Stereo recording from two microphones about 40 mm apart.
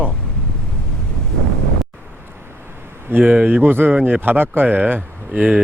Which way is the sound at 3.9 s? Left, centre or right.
Right.